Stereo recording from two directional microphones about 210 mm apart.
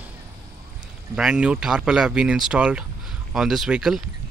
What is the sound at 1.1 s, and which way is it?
Speech, 5° right (ahead or behind).